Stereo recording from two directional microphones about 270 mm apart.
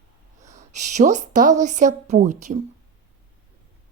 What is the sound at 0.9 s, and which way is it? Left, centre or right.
A woman's voice, right.